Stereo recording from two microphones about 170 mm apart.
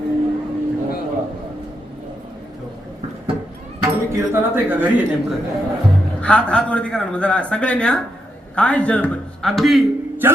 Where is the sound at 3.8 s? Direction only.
20° right (ahead or behind).